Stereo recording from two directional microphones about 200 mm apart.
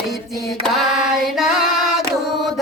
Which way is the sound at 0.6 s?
Centre (ahead or behind).